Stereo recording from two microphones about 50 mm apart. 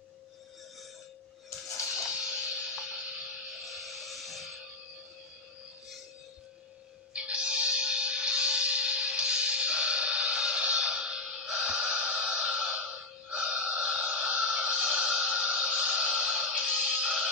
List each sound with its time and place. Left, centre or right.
2.0 s music: centre
3.6 s music: centre
7.2 s music: centre